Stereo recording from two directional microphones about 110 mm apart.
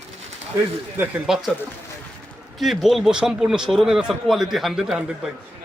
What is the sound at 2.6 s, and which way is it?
A man's voice, centre (ahead or behind).